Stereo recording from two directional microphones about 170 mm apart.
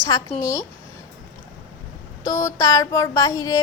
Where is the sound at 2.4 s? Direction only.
20° left (ahead or behind).